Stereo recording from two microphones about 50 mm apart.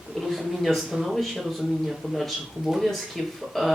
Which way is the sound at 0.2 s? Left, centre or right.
Centre.